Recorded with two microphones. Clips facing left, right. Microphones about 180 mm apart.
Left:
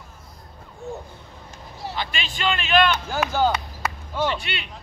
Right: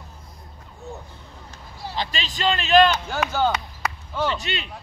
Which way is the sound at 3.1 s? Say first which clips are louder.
Left 1 dB; 10° left (ahead or behind).